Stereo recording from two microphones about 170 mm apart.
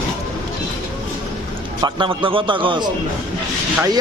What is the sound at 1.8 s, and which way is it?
A man's voice, 30° right (ahead or behind).